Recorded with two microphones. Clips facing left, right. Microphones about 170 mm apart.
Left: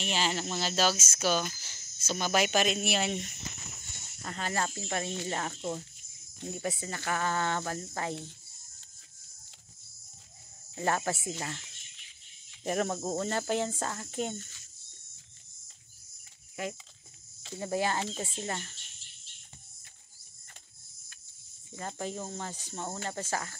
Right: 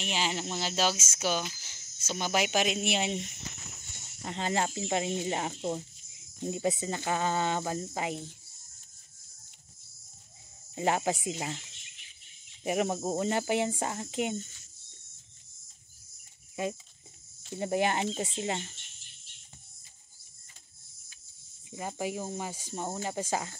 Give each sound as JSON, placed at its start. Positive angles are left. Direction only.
{"t": 0.0, "sound": "speech", "side_deg": -15}
{"t": 10.7, "sound": "speech", "side_deg": -15}
{"t": 12.6, "sound": "speech", "side_deg": -15}
{"t": 17.6, "sound": "speech", "side_deg": -20}
{"t": 21.7, "sound": "speech", "side_deg": -10}